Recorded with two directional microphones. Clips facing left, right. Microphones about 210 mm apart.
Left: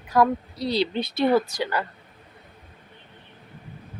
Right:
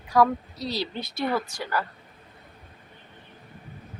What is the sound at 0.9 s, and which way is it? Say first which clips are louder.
Speech: left 7 dB; 30° left (ahead or behind).